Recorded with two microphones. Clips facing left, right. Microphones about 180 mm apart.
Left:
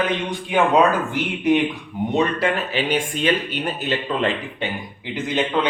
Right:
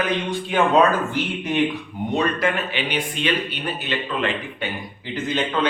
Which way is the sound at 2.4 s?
40° left (ahead or behind).